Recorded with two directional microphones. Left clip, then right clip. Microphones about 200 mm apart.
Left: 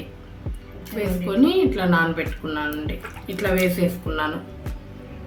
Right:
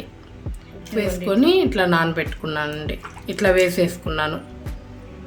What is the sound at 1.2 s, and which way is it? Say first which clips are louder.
Speech: right 2 dB; 55° right (ahead or behind).